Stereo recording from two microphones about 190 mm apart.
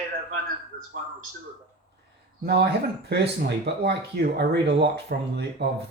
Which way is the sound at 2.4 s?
60° right (ahead or behind).